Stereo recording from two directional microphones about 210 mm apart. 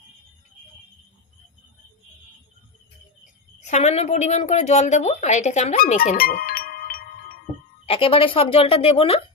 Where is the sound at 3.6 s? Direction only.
30° left (ahead or behind).